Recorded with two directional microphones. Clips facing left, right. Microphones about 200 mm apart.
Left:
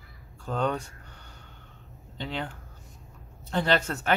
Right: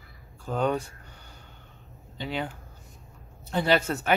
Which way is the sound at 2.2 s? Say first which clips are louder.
Right 2 dB; 10° right (ahead or behind).